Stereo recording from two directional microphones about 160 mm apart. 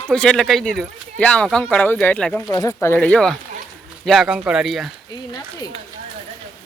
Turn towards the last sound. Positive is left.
turn(degrees=25)  # may be behind; listen again after turning